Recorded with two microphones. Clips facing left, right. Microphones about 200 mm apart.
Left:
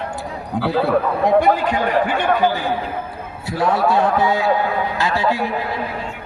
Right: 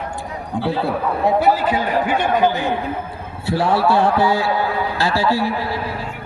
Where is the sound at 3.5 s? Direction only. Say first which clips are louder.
Right 1 dB; 30° right (ahead or behind).